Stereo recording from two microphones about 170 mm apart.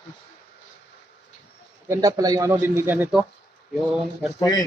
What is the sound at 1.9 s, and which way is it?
Speech, 20° right (ahead or behind).